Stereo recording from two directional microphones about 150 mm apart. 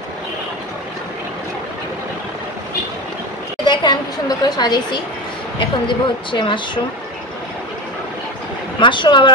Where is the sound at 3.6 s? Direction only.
30° left (ahead or behind).